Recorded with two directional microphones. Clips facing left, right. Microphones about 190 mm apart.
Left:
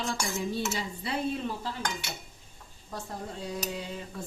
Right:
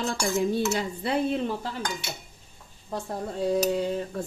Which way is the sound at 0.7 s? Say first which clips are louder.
Right 7 dB; 60° right (ahead or behind).